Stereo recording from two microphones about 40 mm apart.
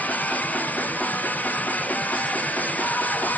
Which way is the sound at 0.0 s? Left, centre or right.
Left.